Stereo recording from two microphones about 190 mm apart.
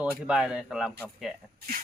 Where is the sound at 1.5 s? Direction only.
50° right (ahead or behind).